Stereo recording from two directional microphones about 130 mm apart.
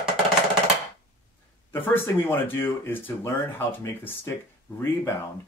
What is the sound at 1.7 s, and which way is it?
Speech, 15° left (ahead or behind).